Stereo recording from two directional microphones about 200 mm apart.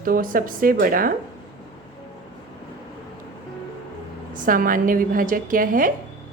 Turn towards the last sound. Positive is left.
turn(degrees=-45)  # may be behind; listen again after turning